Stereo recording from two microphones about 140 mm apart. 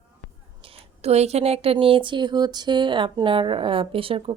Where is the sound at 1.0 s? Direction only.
50° right (ahead or behind).